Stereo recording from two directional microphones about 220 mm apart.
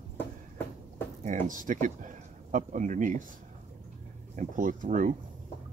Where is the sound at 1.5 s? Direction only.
35° right (ahead or behind).